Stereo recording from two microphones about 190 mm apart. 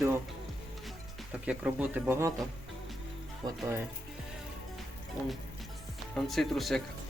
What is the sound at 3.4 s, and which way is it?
Speech, 20° right (ahead or behind).